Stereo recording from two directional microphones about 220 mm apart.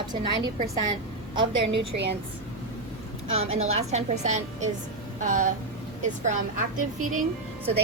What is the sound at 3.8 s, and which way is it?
A woman's voice, 30° right (ahead or behind).